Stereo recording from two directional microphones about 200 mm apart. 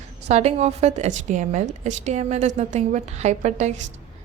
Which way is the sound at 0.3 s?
35° right (ahead or behind).